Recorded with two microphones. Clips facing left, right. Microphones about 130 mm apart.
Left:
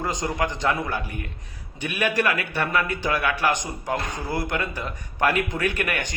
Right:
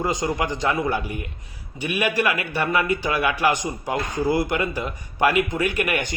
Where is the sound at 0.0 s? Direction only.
10° right (ahead or behind).